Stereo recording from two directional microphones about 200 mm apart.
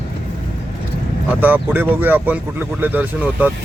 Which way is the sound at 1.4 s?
10° right (ahead or behind).